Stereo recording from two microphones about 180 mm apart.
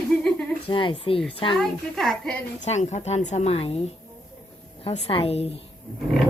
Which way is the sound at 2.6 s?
40° left (ahead or behind).